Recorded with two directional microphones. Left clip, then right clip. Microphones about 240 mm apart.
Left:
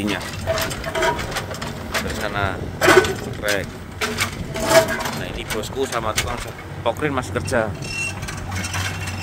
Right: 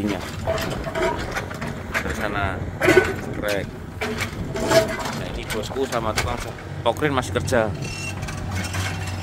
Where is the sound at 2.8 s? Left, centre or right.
Left.